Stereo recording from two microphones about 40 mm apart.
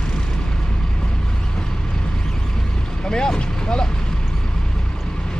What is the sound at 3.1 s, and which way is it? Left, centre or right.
Vehicle, left.